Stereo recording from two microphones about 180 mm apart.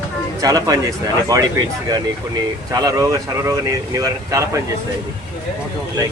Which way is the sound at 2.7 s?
20° right (ahead or behind).